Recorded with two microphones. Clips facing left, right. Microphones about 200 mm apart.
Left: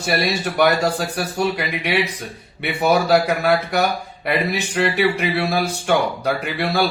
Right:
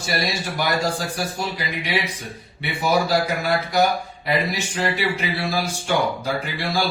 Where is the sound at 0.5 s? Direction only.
65° left (ahead or behind).